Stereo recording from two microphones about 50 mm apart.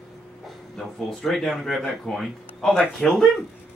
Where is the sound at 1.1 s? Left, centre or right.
Centre.